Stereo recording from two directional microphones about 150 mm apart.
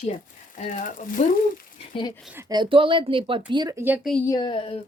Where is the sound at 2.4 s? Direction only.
25° right (ahead or behind).